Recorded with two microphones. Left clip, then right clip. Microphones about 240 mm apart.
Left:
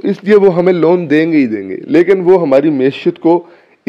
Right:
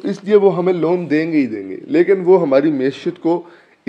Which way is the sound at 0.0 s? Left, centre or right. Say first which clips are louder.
Left 4 dB; left.